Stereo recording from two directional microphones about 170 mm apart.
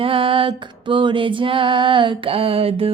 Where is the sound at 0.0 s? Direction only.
30° right (ahead or behind).